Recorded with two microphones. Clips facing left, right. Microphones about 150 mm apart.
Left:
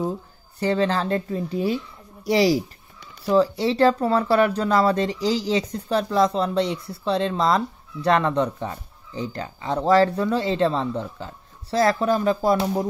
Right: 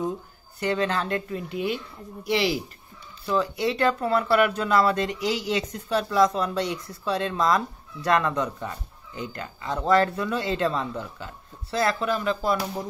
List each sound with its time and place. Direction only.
0.6 s speech: 30° left (ahead or behind)